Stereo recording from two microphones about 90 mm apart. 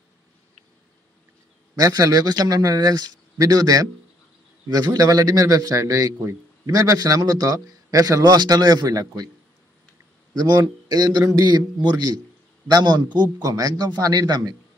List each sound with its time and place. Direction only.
1.8 s a man's voice: 45° right (ahead or behind)
10.3 s a man's voice: 50° right (ahead or behind)